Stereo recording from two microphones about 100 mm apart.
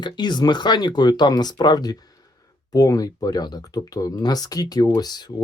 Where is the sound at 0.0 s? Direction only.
45° left (ahead or behind).